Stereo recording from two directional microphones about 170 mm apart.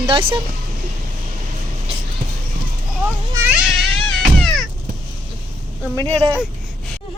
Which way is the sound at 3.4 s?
10° right (ahead or behind).